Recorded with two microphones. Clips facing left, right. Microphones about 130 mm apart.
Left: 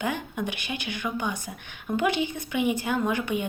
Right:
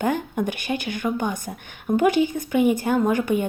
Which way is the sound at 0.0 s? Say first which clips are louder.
Right 6 dB; 45° right (ahead or behind).